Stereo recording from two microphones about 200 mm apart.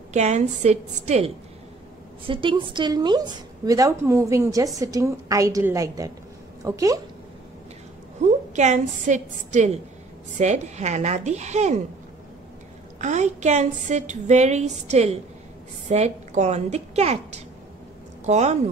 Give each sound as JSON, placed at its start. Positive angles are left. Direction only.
{"t": 0.1, "sound": "a woman's voice", "side_deg": -35}
{"t": 8.2, "sound": "a woman's voice", "side_deg": -35}
{"t": 13.0, "sound": "a woman's voice", "side_deg": -35}